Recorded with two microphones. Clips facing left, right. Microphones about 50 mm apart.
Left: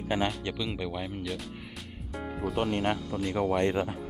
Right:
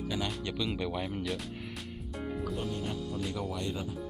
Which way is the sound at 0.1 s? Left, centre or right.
Left.